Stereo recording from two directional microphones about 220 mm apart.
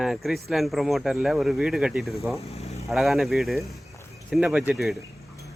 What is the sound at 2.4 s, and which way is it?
Vehicle, 30° left (ahead or behind).